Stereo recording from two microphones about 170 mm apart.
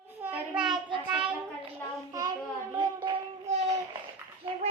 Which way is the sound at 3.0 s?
40° right (ahead or behind).